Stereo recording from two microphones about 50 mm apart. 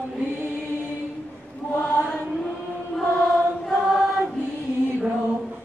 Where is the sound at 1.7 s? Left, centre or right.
Left.